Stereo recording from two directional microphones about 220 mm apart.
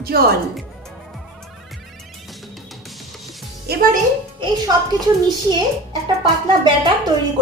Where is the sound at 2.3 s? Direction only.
Centre (ahead or behind).